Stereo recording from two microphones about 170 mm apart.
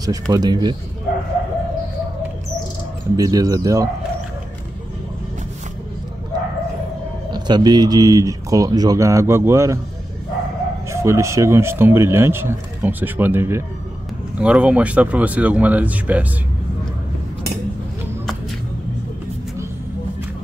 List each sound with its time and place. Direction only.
0.0 s speech: 20° right (ahead or behind)
3.2 s speech: 20° right (ahead or behind)
7.3 s speech: 25° right (ahead or behind)
10.9 s speech: 15° right (ahead or behind)